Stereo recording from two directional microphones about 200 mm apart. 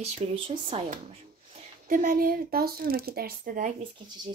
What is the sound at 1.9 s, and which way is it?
Speech, 45° right (ahead or behind).